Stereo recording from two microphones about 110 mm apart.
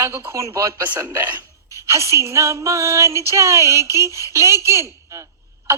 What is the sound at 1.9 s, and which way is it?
A woman's voice, 25° right (ahead or behind).